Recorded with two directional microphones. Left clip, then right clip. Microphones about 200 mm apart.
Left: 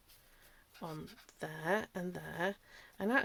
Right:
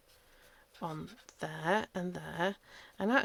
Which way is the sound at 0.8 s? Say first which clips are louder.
Right 5 dB; 30° right (ahead or behind).